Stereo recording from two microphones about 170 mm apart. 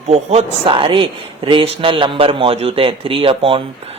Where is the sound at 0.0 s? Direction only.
40° right (ahead or behind).